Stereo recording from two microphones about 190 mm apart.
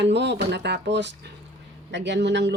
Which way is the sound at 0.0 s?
65° right (ahead or behind).